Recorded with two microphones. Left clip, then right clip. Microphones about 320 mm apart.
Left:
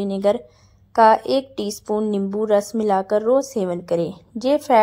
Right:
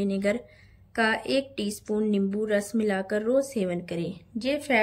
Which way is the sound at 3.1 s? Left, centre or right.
Centre.